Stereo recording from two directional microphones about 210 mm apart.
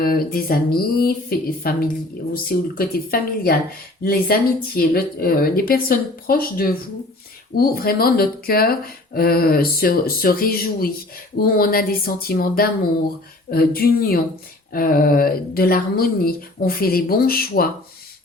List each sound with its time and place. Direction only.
0.0 s speech: 45° left (ahead or behind)